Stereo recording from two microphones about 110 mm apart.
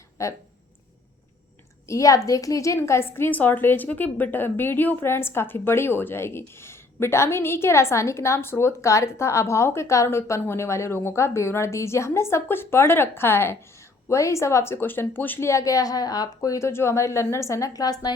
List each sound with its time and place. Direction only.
0.2 s a woman's voice: 25° left (ahead or behind)
1.9 s a woman's voice: 30° left (ahead or behind)